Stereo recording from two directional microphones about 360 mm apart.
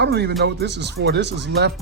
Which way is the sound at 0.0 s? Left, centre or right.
Right.